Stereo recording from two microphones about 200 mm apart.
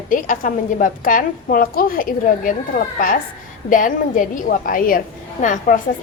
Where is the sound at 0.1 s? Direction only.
45° left (ahead or behind).